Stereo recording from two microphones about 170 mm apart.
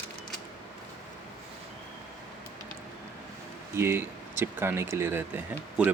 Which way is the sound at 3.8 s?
15° right (ahead or behind).